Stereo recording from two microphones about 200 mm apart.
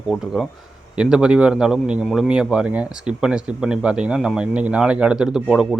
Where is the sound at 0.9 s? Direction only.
5° right (ahead or behind).